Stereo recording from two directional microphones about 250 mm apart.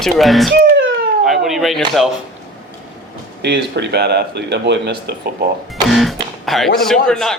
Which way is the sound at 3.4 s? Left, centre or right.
Right.